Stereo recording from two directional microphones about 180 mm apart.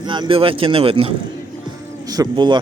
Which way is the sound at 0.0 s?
25° right (ahead or behind).